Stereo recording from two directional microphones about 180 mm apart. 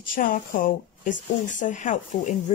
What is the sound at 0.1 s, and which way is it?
Speech, 50° left (ahead or behind).